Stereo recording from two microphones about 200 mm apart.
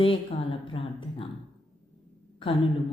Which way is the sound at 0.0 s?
25° left (ahead or behind).